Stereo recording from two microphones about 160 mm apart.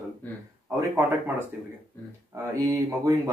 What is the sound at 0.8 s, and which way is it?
Speech, 15° right (ahead or behind).